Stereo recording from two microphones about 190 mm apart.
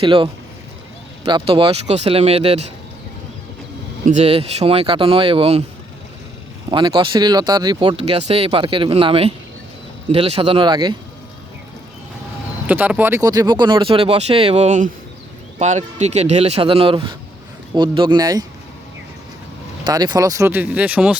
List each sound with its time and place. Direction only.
0.0 s speech: 25° right (ahead or behind)
4.0 s speech: 35° right (ahead or behind)
6.7 s speech: 25° right (ahead or behind)
12.6 s speech: 10° right (ahead or behind)
19.8 s speech: 20° right (ahead or behind)